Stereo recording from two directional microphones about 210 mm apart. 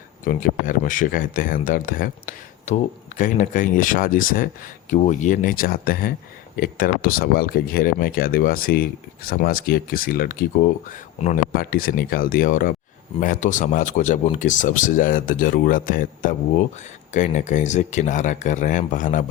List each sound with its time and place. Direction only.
0.3 s speech: 40° left (ahead or behind)